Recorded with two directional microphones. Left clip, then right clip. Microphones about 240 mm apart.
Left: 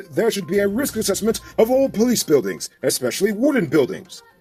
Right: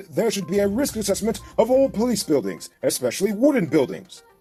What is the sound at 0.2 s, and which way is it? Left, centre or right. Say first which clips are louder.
Speech: left 2 dB; right.